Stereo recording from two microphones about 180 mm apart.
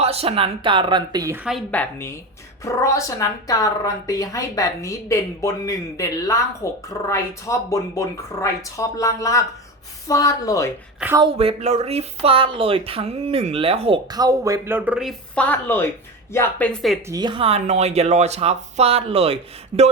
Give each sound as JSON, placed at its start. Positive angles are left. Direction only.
{"t": 0.0, "sound": "speech", "side_deg": -35}
{"t": 1.5, "sound": "a woman's voice", "side_deg": 5}
{"t": 11.2, "sound": "speech", "side_deg": -30}
{"t": 15.4, "sound": "a woman's voice", "side_deg": 10}
{"t": 17.1, "sound": "speech", "side_deg": -25}